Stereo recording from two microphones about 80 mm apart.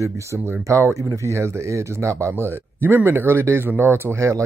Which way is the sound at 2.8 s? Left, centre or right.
Right.